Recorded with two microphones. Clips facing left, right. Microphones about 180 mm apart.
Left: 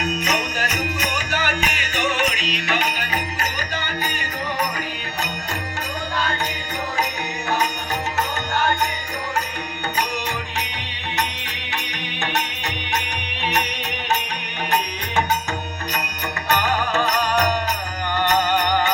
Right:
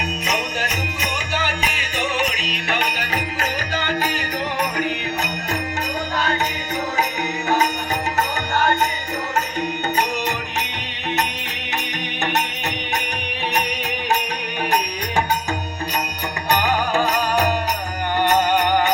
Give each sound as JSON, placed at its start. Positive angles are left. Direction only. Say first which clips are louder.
{"t": 0.3, "sound": "music", "louder": "even", "side_deg": -25}
{"t": 16.5, "sound": "music", "louder": "right 2 dB", "side_deg": -15}